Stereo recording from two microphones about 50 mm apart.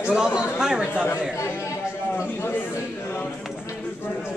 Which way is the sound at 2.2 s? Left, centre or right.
Left.